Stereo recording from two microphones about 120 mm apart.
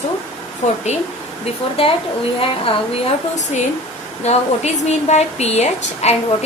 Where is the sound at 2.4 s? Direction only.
50° left (ahead or behind).